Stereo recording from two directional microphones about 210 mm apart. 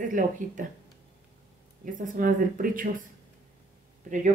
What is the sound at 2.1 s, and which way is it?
Speech, 40° right (ahead or behind).